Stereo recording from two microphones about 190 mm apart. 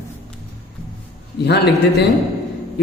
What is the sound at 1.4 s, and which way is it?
Speech, 60° left (ahead or behind).